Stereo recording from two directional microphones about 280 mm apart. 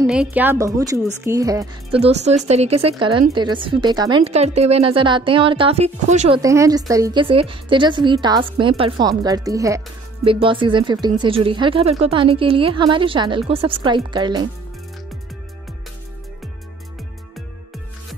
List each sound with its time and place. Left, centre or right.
0.0 s speech: centre; by 6.4 s right
6.4 s speech: centre